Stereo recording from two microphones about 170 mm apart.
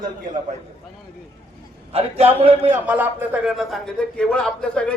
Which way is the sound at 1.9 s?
35° right (ahead or behind).